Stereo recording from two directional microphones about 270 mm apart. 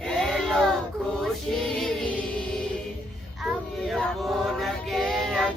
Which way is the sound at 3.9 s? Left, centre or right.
Centre.